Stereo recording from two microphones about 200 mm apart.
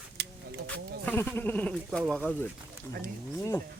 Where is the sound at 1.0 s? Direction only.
10° left (ahead or behind).